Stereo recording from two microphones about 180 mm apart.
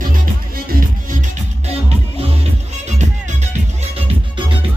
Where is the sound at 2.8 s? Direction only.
40° right (ahead or behind).